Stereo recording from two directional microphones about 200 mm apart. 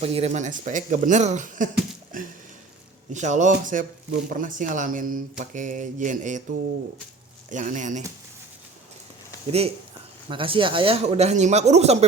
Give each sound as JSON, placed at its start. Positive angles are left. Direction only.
{"t": 0.0, "sound": "a man's voice", "side_deg": -30}
{"t": 3.1, "sound": "a man's voice", "side_deg": -35}
{"t": 7.5, "sound": "a man's voice", "side_deg": -40}
{"t": 9.5, "sound": "a man's voice", "side_deg": -30}